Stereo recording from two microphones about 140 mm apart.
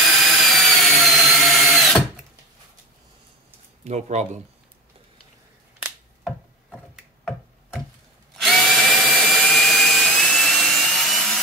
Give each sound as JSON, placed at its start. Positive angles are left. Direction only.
{"t": 0.0, "sound": "tools", "side_deg": 0}
{"t": 3.8, "sound": "speech", "side_deg": -55}
{"t": 5.8, "sound": "a sound", "side_deg": -5}
{"t": 8.4, "sound": "drill", "side_deg": 0}